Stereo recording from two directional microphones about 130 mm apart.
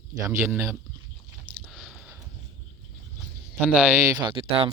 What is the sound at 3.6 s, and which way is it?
Speech, 5° right (ahead or behind).